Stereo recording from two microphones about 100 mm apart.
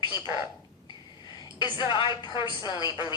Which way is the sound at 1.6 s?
50° left (ahead or behind).